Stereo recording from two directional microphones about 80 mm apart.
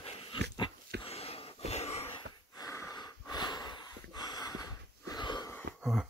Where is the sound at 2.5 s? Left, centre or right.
Left.